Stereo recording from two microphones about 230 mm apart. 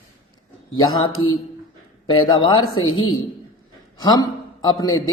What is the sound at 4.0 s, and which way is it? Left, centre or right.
A man's voice, centre.